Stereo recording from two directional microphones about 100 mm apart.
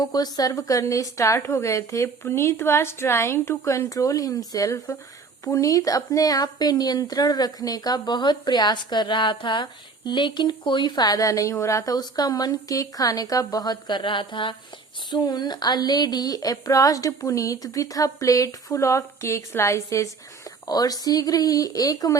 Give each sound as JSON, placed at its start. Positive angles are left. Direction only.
{"t": 0.0, "sound": "speech", "side_deg": 40}
{"t": 15.1, "sound": "speech", "side_deg": 45}
{"t": 20.7, "sound": "speech", "side_deg": 40}